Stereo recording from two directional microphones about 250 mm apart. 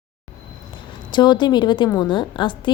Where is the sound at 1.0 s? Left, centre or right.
Centre.